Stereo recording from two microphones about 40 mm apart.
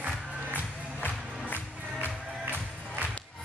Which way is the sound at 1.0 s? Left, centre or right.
Left.